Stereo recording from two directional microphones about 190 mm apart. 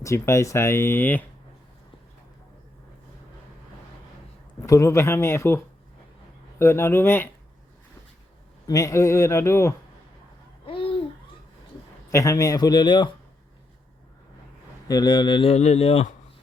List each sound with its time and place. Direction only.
0.0 s speech: 15° left (ahead or behind)
4.6 s speech: 15° left (ahead or behind)
8.6 s speech: 20° left (ahead or behind)
10.7 s babbling: 30° left (ahead or behind)
12.1 s speech: 15° left (ahead or behind)
14.8 s speech: 20° left (ahead or behind)